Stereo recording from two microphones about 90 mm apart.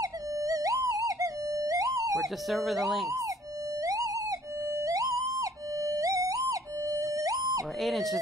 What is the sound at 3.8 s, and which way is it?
Theremin, 40° right (ahead or behind).